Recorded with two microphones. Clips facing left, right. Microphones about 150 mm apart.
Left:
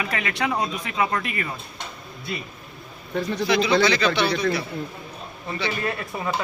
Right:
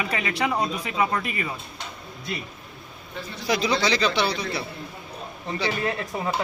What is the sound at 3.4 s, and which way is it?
A man's voice, 40° right (ahead or behind).